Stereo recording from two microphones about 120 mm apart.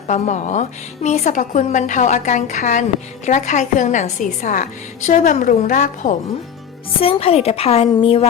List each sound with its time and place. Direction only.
0.1 s a woman's voice: 85° left
7.0 s a woman's voice: 55° left (ahead or behind)